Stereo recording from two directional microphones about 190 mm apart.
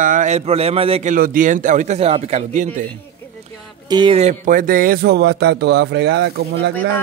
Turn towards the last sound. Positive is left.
turn(degrees=-60)  # may be behind; listen again after turning